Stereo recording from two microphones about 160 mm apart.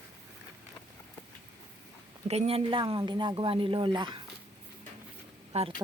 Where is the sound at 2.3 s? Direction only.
40° right (ahead or behind).